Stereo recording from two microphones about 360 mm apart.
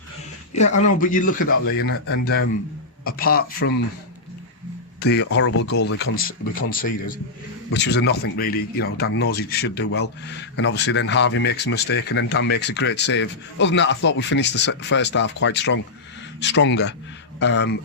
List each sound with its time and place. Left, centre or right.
0.9 s speech: left
1.4 s speech: left
1.9 s a man's voice: left
4.9 s speech: left